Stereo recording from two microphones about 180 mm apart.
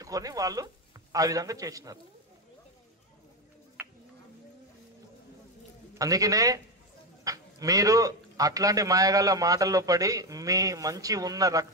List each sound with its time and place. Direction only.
0.0 s speech: 20° right (ahead or behind)
5.9 s speech: 20° right (ahead or behind)